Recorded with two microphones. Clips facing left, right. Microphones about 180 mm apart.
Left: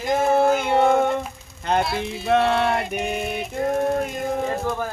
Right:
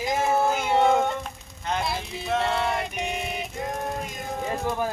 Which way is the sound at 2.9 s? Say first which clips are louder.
Left 5 dB; centre (ahead or behind).